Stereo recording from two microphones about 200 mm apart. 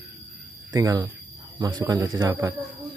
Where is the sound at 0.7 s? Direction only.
20° right (ahead or behind).